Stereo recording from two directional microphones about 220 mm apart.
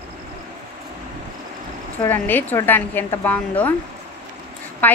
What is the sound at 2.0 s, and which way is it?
A woman's voice, 10° left (ahead or behind).